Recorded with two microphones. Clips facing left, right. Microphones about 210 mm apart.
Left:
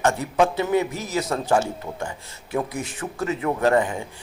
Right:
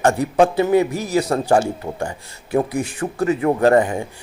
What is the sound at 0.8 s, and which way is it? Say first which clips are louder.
Speech: right 7 dB; 10° right (ahead or behind).